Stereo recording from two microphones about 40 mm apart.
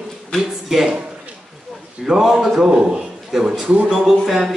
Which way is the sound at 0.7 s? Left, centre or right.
Centre.